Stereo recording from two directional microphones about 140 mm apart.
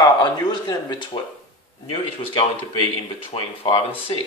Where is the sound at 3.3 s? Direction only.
50° left (ahead or behind).